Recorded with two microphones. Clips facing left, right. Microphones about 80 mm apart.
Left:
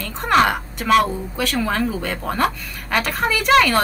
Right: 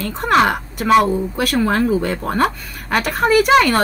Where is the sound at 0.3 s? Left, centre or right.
Centre.